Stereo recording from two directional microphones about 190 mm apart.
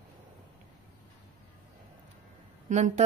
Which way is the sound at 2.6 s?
40° right (ahead or behind).